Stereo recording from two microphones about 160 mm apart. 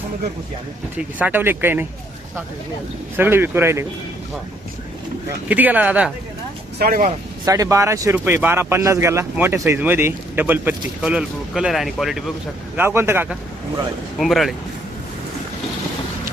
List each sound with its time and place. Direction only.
0.9 s speech: 10° right (ahead or behind)
3.2 s speech: 15° right (ahead or behind)
5.5 s speech: 10° right (ahead or behind)
6.7 s speech: 65° right (ahead or behind)
7.4 s speech: 20° right (ahead or behind); by 12.2 s centre (ahead or behind)
12.7 s speech: 15° right (ahead or behind)
14.2 s speech: centre (ahead or behind)